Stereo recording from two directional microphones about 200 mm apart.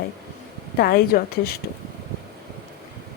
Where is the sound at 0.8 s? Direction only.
50° left (ahead or behind).